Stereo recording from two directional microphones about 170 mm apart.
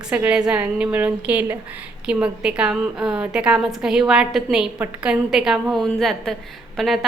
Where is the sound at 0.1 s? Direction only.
5° right (ahead or behind).